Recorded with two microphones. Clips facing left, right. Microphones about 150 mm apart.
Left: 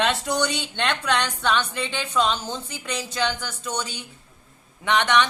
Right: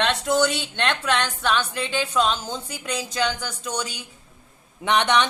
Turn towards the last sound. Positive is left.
turn(degrees=-15)  # may be behind; listen again after turning